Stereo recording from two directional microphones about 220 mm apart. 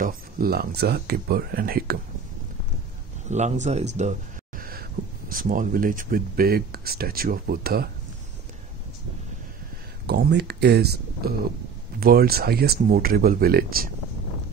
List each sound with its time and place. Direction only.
0.0 s speech: 45° right (ahead or behind)
3.3 s speech: 30° right (ahead or behind)
10.0 s speech: 50° right (ahead or behind)